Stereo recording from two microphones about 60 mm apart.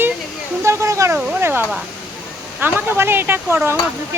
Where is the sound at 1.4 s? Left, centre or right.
Right.